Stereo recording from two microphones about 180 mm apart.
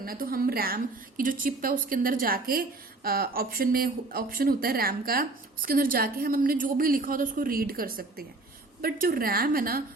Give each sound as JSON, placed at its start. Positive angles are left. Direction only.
{"t": 0.0, "sound": "a woman's voice", "side_deg": -55}